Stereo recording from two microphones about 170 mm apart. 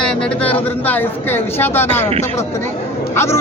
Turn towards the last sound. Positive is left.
turn(degrees=15)  # may be behind; listen again after turning